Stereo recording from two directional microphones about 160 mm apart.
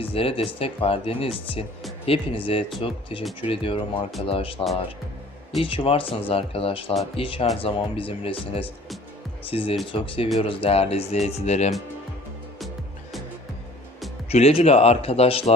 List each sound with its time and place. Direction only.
0.0 s speech: 35° left (ahead or behind)
12.5 s music: centre (ahead or behind)
14.3 s speech: 40° left (ahead or behind)